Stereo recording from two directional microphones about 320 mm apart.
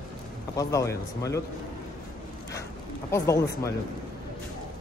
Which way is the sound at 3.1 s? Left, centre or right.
Centre.